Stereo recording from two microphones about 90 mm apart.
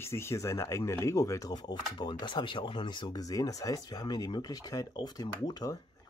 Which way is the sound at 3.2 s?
40° left (ahead or behind).